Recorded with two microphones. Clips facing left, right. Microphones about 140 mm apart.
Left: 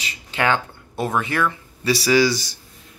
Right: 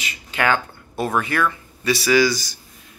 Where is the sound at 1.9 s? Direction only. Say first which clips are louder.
Even; 35° left (ahead or behind).